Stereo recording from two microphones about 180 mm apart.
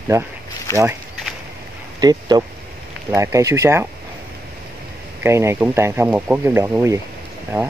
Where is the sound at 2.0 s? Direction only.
20° right (ahead or behind).